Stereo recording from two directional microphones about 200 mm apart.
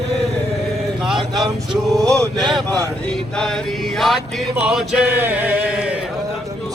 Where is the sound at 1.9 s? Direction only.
15° right (ahead or behind).